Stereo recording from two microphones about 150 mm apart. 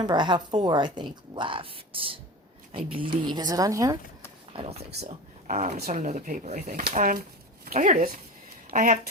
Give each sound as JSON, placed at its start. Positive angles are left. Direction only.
{"t": 0.0, "sound": "a woman's voice", "side_deg": -30}
{"t": 4.5, "sound": "speech", "side_deg": -45}
{"t": 5.5, "sound": "speech", "side_deg": -60}